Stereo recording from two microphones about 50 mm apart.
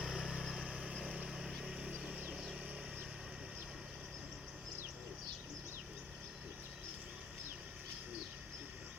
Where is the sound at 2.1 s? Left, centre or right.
Right.